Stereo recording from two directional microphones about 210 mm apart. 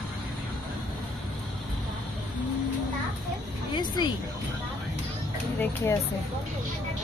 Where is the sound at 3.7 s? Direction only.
20° left (ahead or behind).